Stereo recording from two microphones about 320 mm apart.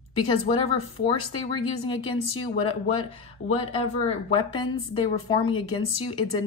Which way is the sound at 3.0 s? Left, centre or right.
Centre.